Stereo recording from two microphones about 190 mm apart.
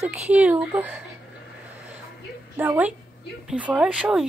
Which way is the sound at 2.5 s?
10° right (ahead or behind).